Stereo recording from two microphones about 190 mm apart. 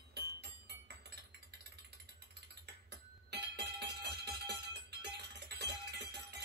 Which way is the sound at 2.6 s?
60° right (ahead or behind).